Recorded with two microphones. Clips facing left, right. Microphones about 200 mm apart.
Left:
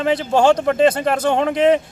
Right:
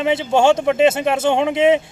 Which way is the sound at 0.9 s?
25° right (ahead or behind).